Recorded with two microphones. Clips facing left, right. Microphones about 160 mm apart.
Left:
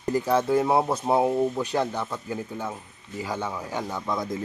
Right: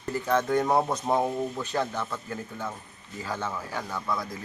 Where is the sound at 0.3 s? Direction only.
10° left (ahead or behind).